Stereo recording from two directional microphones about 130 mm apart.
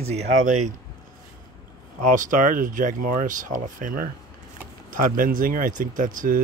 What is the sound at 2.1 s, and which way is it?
Speech, 80° right.